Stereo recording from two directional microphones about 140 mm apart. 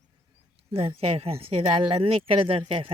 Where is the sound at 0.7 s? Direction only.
45° right (ahead or behind).